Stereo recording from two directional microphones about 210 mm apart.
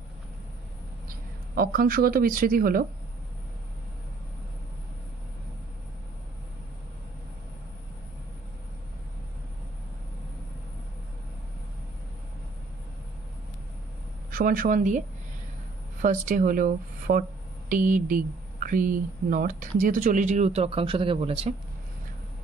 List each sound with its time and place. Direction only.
1.0 s speech: 45° right (ahead or behind)
14.3 s speech: 40° right (ahead or behind)